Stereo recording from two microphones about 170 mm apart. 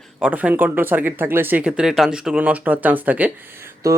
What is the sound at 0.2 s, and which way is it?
Speech, 10° right (ahead or behind).